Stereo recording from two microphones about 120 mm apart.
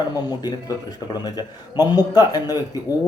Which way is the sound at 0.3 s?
35° left (ahead or behind).